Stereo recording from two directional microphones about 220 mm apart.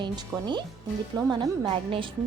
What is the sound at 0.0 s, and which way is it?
A woman's voice, 20° right (ahead or behind).